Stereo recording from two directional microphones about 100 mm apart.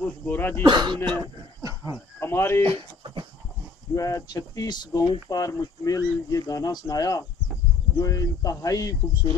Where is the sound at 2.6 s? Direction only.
65° right (ahead or behind).